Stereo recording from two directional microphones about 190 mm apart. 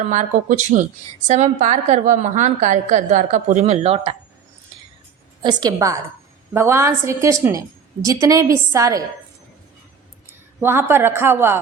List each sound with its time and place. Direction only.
0.0 s a woman's voice: 40° right (ahead or behind)
5.4 s a woman's voice: 20° right (ahead or behind)
10.6 s a woman's voice: 10° right (ahead or behind)